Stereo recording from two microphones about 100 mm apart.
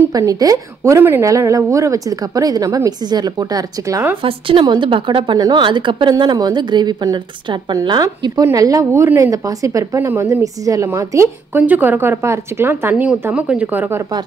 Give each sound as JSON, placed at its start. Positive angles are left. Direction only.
{"t": 0.1, "sound": "a woman's voice", "side_deg": -35}
{"t": 4.2, "sound": "a woman's voice", "side_deg": -60}